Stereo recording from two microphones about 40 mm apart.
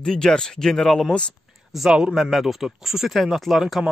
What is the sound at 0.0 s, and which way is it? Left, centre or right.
Speech, centre.